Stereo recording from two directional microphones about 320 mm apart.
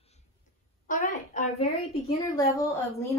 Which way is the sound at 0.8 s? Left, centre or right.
Left.